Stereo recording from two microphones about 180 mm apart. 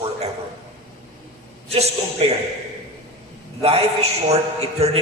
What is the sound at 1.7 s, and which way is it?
Speech, 35° right (ahead or behind).